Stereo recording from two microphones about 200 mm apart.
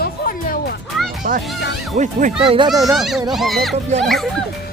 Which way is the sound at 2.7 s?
Centre (ahead or behind).